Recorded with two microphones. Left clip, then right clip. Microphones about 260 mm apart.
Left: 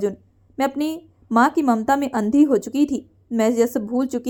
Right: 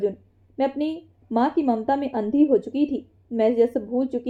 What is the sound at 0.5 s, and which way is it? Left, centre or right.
A woman's voice, left.